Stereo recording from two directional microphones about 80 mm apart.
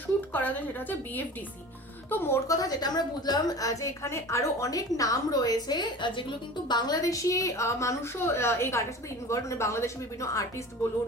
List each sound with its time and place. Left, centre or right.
0.3 s a woman's voice: left
2.5 s a woman's voice: left
6.7 s a woman's voice: left